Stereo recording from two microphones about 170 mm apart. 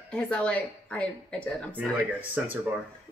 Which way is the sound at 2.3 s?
10° right (ahead or behind).